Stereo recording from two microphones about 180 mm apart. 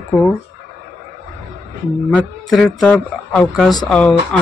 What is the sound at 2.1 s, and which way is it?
Speech, centre (ahead or behind).